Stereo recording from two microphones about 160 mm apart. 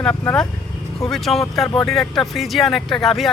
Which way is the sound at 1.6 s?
25° left (ahead or behind).